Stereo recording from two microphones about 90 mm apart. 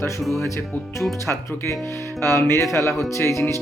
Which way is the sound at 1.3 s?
35° left (ahead or behind).